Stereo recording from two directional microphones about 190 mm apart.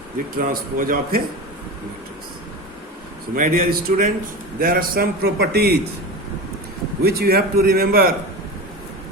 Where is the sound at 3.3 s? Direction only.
45° right (ahead or behind).